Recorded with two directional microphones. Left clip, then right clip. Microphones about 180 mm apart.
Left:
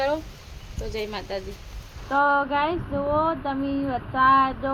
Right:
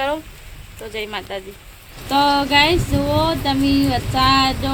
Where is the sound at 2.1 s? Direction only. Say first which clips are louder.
Right 6 dB; 25° left (ahead or behind).